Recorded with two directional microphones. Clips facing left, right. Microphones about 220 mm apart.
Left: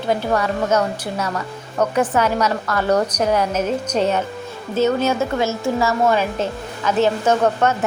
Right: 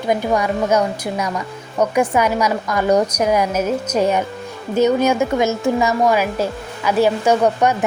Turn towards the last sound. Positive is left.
turn(degrees=-15)  # may be behind; listen again after turning